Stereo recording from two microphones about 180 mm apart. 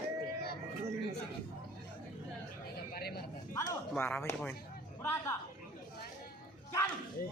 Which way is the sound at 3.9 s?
10° left (ahead or behind).